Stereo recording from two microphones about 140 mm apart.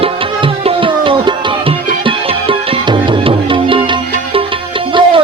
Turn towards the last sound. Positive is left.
turn(degrees=-40)  # may be behind; listen again after turning